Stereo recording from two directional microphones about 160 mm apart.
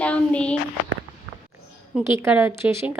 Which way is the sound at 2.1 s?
15° right (ahead or behind).